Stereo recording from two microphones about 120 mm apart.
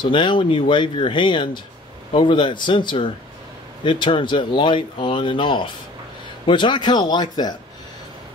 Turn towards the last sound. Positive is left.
turn(degrees=35)  # may be behind; listen again after turning